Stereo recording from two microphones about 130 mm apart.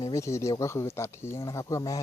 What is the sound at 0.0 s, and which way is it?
Speech, 25° left (ahead or behind).